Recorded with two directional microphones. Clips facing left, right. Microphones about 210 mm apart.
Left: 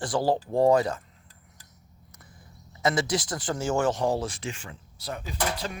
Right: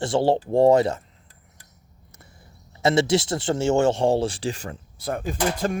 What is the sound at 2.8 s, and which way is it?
Speech, 25° right (ahead or behind).